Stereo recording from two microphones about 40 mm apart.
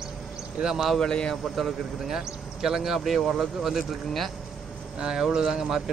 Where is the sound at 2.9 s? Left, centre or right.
Centre.